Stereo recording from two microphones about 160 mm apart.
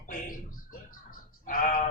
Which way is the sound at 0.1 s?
60° left (ahead or behind).